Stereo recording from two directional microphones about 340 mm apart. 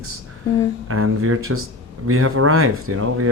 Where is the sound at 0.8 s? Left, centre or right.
Right.